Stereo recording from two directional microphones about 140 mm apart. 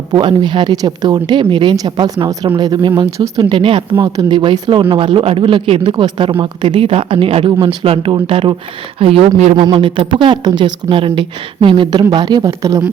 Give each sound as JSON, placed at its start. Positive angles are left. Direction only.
{"t": 0.1, "sound": "speech", "side_deg": -35}
{"t": 3.5, "sound": "speech", "side_deg": -40}
{"t": 9.6, "sound": "speech", "side_deg": -35}